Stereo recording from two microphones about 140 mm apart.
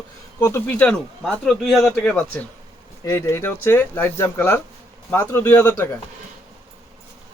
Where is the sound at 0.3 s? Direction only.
15° left (ahead or behind).